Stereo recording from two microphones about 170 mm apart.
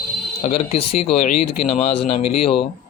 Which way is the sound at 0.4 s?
35° left (ahead or behind).